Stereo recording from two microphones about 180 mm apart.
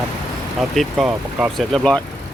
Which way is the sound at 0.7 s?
5° right (ahead or behind).